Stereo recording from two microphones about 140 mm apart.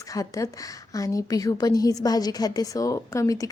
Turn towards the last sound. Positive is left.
turn(degrees=25)  # may be behind; listen again after turning